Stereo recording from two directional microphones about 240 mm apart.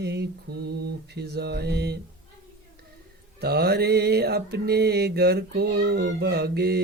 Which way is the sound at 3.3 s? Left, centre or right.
Right.